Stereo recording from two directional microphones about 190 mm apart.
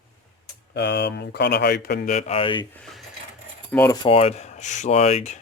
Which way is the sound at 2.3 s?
30° left (ahead or behind).